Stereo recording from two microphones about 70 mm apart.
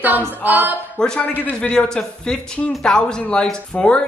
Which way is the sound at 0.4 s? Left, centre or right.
Right.